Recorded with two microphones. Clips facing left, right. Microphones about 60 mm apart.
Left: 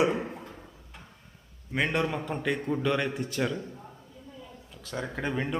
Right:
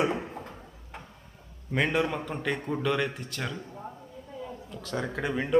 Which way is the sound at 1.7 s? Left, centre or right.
Centre.